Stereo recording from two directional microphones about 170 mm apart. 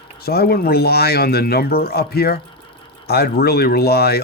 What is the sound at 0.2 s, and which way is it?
Speech, 65° left (ahead or behind).